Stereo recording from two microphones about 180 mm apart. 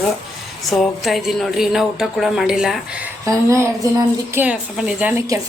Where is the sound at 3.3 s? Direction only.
15° right (ahead or behind).